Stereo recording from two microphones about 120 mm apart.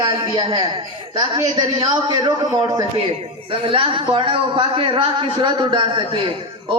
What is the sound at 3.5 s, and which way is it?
A woman's voice, 50° right (ahead or behind).